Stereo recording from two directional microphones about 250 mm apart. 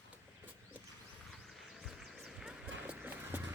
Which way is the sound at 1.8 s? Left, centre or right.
Centre.